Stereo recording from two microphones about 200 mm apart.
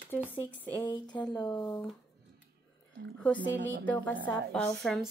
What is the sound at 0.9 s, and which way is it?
Speech, 20° left (ahead or behind).